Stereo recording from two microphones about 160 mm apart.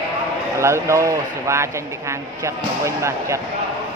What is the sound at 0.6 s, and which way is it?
Speech, 15° right (ahead or behind).